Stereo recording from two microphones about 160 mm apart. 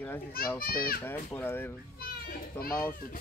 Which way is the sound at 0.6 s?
70° left (ahead or behind).